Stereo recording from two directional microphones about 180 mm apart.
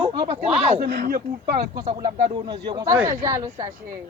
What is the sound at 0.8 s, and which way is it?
Speech, 60° right (ahead or behind).